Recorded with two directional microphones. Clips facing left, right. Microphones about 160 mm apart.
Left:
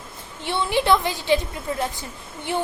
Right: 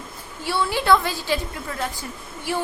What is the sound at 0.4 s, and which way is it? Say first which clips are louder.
A woman's voice: even; 20° left (ahead or behind).